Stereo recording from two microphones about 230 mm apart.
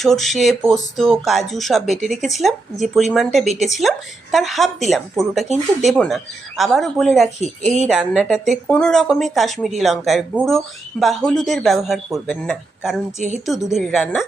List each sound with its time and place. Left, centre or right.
0.0 s speech: centre